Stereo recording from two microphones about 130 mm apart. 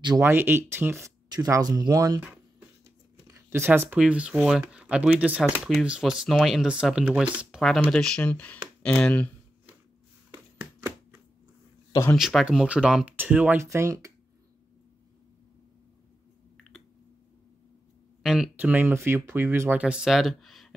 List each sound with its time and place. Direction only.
0.2 s speech: 20° right (ahead or behind)
3.3 s speech: 20° right (ahead or behind); by 9.3 s 10° left (ahead or behind)
12.2 s speech: 5° right (ahead or behind); by 14.1 s 25° right (ahead or behind)
18.2 s a sound: 5° right (ahead or behind)
18.6 s speech: 15° right (ahead or behind)
19.8 s speech: 5° right (ahead or behind)